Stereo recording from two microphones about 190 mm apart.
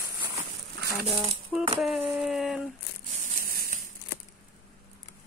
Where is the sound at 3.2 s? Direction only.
50° right (ahead or behind).